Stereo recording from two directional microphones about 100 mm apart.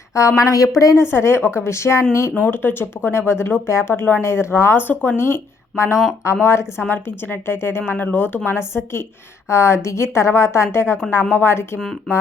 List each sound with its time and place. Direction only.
0.1 s speech: 30° left (ahead or behind)